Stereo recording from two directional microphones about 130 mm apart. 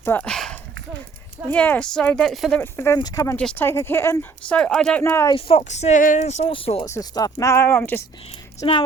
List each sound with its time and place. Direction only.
0.0 s speech: 15° left (ahead or behind)
0.3 s a sound: 5° left (ahead or behind)
1.5 s speech: 10° left (ahead or behind)
2.6 s speech: 20° left (ahead or behind)
3.0 s speech: 30° left (ahead or behind)
3.3 s speech: 10° left (ahead or behind)
4.4 s speech: 5° left (ahead or behind)
5.3 s speech: 45° left (ahead or behind)
5.6 s speech: 60° left (ahead or behind)
6.5 s speech: 45° left (ahead or behind)
6.8 s speech: 25° left (ahead or behind)